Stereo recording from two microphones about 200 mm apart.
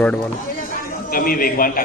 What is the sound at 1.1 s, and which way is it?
Speech, 45° left (ahead or behind).